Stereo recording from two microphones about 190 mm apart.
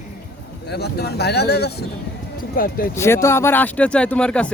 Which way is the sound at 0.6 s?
60° left (ahead or behind).